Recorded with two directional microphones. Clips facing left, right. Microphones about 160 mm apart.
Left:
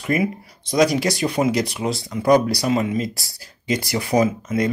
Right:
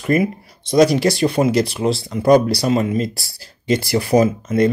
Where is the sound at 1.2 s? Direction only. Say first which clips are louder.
Right 4 dB; 30° right (ahead or behind).